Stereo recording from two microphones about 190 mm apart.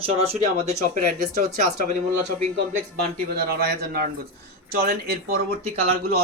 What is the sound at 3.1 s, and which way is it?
Speech, 55° right (ahead or behind).